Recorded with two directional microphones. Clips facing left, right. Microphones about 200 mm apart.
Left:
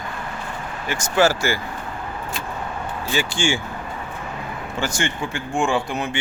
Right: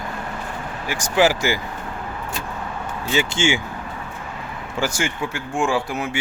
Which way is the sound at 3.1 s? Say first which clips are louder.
Right 2 dB; 20° right (ahead or behind).